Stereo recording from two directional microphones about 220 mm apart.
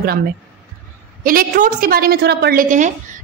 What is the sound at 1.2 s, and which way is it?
A woman's voice, 40° right (ahead or behind).